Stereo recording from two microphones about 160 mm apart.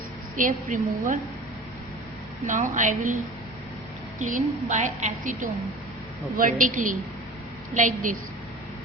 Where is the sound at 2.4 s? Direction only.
55° right (ahead or behind).